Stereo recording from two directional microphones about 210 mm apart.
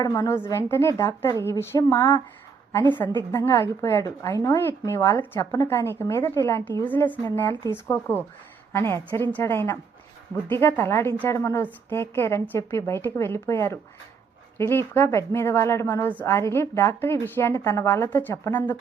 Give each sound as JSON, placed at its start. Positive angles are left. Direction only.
{"t": 0.0, "sound": "a woman's voice", "side_deg": 15}